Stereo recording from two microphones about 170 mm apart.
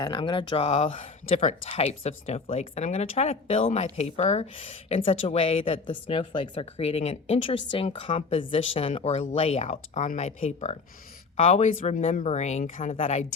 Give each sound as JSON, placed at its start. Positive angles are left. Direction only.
{"t": 0.0, "sound": "speech", "side_deg": 25}